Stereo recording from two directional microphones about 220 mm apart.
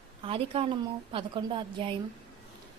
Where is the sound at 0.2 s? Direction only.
25° right (ahead or behind).